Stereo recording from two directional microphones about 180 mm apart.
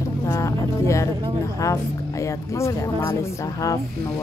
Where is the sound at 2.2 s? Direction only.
15° left (ahead or behind).